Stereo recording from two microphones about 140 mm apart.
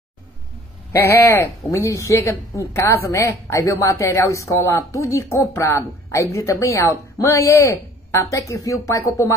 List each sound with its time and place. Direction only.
0.9 s speech: 15° left (ahead or behind)